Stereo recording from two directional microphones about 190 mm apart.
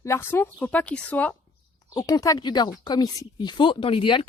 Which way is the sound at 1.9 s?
20° left (ahead or behind).